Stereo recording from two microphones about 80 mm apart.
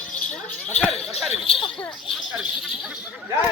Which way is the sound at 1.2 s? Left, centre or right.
Centre.